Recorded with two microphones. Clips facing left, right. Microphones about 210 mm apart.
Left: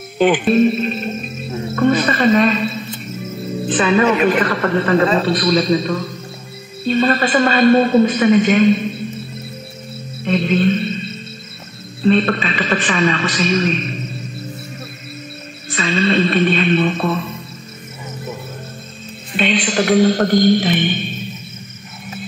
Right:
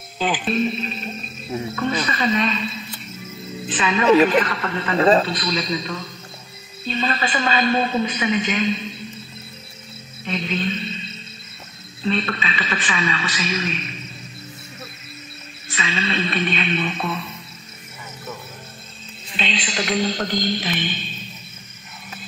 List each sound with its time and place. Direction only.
0.2 s a woman's voice: 60° left (ahead or behind)
10.2 s music: 50° left (ahead or behind)
12.3 s a woman's voice: 45° left (ahead or behind)
15.7 s a woman's voice: 50° left (ahead or behind)
19.3 s a man's voice: 55° left (ahead or behind)